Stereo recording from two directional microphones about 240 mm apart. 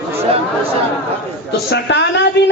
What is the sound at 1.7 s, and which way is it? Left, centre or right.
Speech, left.